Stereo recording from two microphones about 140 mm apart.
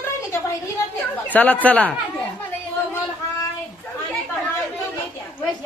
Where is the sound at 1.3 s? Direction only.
10° left (ahead or behind).